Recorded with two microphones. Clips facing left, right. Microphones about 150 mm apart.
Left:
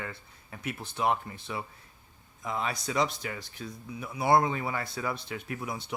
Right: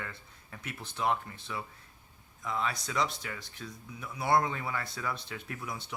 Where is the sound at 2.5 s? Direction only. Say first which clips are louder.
Left 2 dB; 15° left (ahead or behind).